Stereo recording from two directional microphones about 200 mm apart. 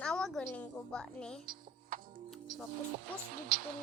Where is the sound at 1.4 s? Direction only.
45° right (ahead or behind).